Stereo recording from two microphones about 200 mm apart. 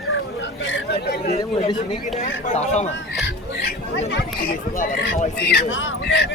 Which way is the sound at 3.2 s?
60° left (ahead or behind).